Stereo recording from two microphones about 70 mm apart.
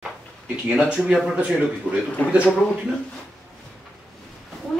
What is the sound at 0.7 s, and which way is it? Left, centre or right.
Speech, centre.